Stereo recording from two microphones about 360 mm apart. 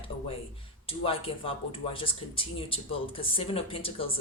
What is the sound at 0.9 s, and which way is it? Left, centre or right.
Speech, centre.